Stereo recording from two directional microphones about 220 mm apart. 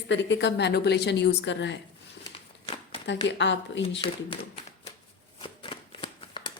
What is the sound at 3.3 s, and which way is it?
Speech, 55° left (ahead or behind).